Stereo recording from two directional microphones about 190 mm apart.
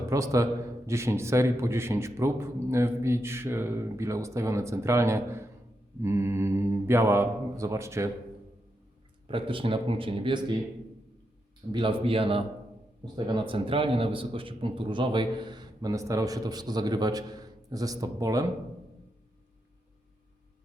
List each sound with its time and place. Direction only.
0.0 s a man's voice: 15° right (ahead or behind)
9.2 s a man's voice: 25° right (ahead or behind)
11.7 s a man's voice: 25° right (ahead or behind)